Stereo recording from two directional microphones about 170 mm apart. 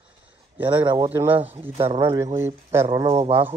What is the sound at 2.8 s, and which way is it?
Speech, 25° right (ahead or behind).